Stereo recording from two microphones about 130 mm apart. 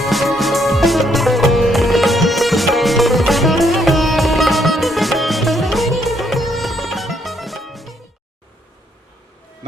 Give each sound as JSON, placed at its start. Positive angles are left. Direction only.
{"t": 0.0, "sound": "music", "side_deg": 0}